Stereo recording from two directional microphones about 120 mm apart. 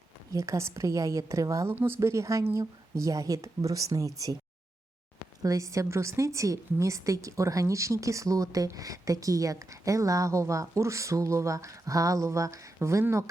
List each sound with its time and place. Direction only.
0.3 s a woman's voice: 25° right (ahead or behind)
5.4 s a woman's voice: 30° right (ahead or behind)